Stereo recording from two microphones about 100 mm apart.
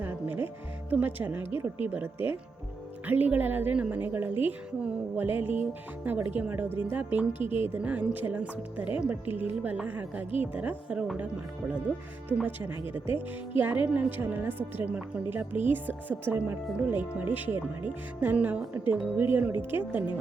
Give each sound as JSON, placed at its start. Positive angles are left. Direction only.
{"t": 0.0, "sound": "music", "side_deg": -20}
{"t": 3.1, "sound": "a woman's voice", "side_deg": -15}
{"t": 12.4, "sound": "a woman's voice", "side_deg": -20}